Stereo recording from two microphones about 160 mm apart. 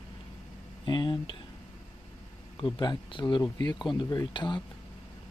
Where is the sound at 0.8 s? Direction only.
30° left (ahead or behind).